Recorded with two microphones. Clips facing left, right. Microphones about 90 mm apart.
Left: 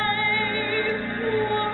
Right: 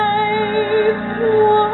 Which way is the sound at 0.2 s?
30° right (ahead or behind).